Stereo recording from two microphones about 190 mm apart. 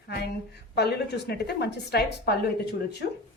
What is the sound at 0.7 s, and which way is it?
A woman's voice, 65° left (ahead or behind).